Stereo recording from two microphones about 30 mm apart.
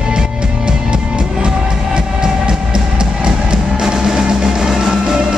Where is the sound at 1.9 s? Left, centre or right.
Right.